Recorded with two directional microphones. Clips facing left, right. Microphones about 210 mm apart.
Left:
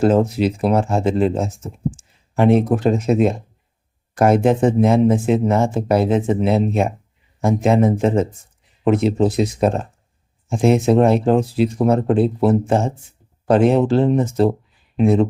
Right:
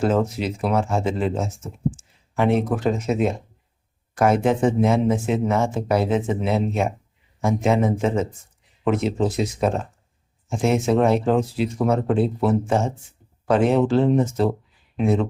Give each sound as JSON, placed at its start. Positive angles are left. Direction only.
{"t": 0.0, "sound": "speech", "side_deg": 35}